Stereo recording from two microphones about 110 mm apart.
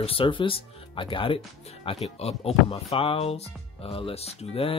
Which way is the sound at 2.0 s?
70° left (ahead or behind).